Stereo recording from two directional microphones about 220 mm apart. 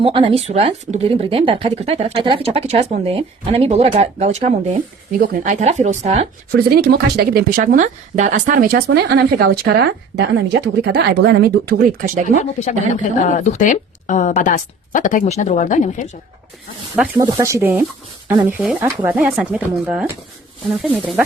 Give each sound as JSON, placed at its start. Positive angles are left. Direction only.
{"t": 0.0, "sound": "speech", "side_deg": -25}
{"t": 6.5, "sound": "speech", "side_deg": -45}
{"t": 12.4, "sound": "speech", "side_deg": 35}
{"t": 16.9, "sound": "speech", "side_deg": -10}